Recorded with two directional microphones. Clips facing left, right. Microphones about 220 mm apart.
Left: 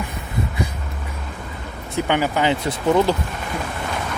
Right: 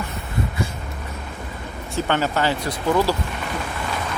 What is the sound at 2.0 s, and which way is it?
Speech, 15° left (ahead or behind).